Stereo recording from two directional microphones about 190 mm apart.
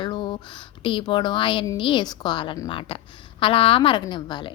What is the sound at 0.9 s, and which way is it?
A woman's voice, 25° left (ahead or behind).